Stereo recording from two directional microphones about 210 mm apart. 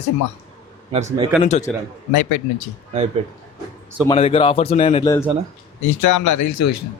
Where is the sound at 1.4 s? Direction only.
35° left (ahead or behind).